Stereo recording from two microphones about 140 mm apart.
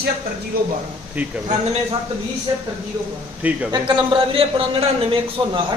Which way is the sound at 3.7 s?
35° right (ahead or behind).